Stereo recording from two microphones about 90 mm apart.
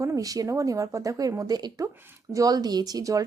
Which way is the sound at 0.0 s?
40° right (ahead or behind).